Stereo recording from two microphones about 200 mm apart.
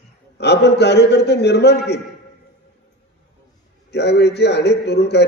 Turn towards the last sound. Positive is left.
turn(degrees=55)  # may be behind; listen again after turning